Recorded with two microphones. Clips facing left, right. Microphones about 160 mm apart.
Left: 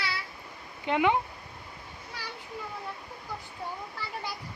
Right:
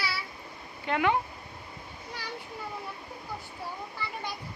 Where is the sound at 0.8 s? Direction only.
15° left (ahead or behind).